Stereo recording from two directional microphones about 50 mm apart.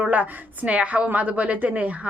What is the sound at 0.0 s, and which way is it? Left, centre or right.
A woman's voice, right.